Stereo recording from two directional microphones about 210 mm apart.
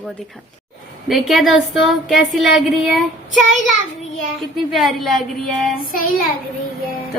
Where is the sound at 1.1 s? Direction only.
Centre (ahead or behind).